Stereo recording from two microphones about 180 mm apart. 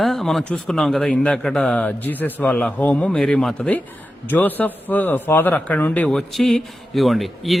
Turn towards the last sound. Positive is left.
turn(degrees=0)  # may be behind; listen again after turning